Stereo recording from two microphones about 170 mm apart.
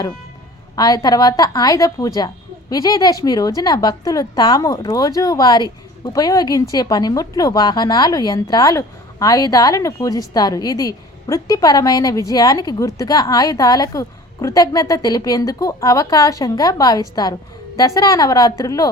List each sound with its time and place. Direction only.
0.8 s a woman's voice: 20° left (ahead or behind)